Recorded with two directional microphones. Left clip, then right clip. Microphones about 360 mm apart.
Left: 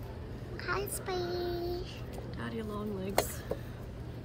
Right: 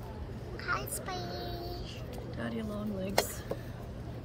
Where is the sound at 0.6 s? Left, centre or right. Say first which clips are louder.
Even; centre.